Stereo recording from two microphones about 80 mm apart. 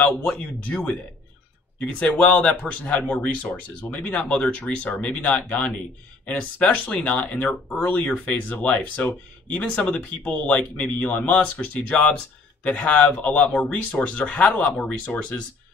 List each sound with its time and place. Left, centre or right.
0.0 s a man's voice: centre